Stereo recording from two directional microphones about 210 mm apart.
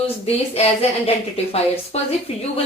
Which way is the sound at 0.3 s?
30° left (ahead or behind).